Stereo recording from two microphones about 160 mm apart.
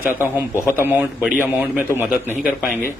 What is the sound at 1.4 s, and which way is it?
Speech, 10° right (ahead or behind).